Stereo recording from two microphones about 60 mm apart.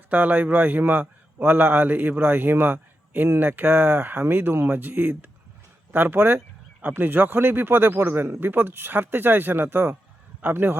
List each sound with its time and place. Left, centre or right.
0.1 s a man's voice: right